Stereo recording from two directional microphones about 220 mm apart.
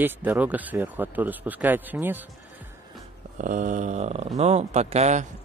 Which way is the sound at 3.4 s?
35° right (ahead or behind).